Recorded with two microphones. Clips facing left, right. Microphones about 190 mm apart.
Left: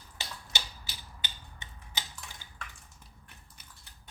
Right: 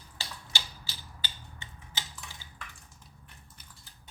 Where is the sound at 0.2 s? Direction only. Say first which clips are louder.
Left 1 dB; 20° left (ahead or behind).